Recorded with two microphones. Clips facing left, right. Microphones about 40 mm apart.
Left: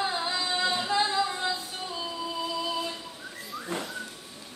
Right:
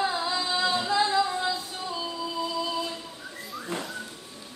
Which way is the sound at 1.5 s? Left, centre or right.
Centre.